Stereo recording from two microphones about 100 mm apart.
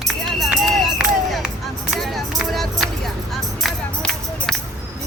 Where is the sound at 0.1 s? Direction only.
Centre (ahead or behind).